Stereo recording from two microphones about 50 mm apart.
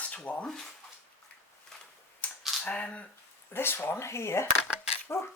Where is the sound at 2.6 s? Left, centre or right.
Left.